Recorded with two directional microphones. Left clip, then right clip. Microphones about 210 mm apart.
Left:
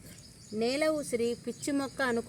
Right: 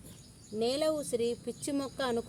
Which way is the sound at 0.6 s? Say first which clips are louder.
Left 1 dB; 20° left (ahead or behind).